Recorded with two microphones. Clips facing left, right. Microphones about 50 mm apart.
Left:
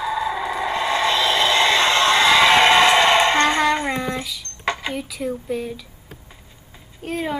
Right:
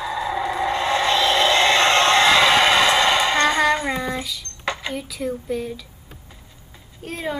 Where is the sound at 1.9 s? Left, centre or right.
Right.